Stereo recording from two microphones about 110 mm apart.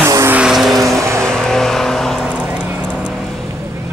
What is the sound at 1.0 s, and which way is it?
Vehicle, 25° right (ahead or behind).